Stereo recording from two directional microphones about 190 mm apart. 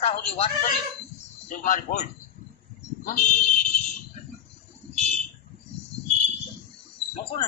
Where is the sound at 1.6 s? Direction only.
40° left (ahead or behind).